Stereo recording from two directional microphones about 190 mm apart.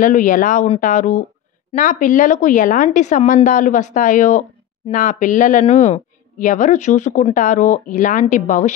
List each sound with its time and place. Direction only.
0.0 s a man's voice: 45° left (ahead or behind)